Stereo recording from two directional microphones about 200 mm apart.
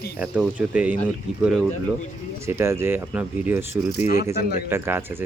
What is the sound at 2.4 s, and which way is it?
Speech, 15° right (ahead or behind).